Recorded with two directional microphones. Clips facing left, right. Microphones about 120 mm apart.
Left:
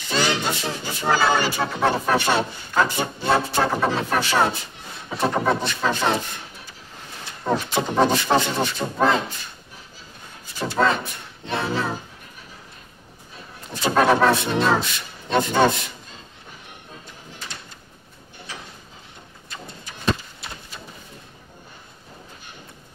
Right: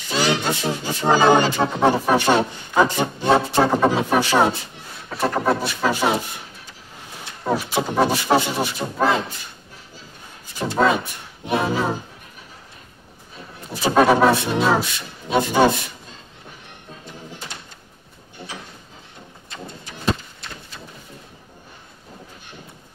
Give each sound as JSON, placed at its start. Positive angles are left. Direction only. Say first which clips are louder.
{"t": 0.1, "sound": "music", "louder": "right 2 dB", "side_deg": -10}
{"t": 5.1, "sound": "music", "louder": "right 1 dB", "side_deg": 0}
{"t": 7.4, "sound": "music", "louder": "right 1 dB", "side_deg": -5}
{"t": 8.8, "sound": "speech", "louder": "even", "side_deg": 0}
{"t": 10.6, "sound": "music", "louder": "right 2 dB", "side_deg": -10}
{"t": 13.7, "sound": "music", "louder": "right 2 dB", "side_deg": -10}